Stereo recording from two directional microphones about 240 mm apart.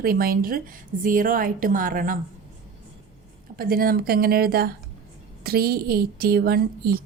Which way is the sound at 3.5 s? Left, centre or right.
Right.